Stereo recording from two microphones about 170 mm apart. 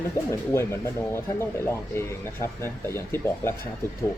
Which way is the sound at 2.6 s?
15° left (ahead or behind).